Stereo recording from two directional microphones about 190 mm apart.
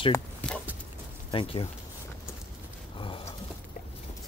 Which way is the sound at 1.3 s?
30° left (ahead or behind).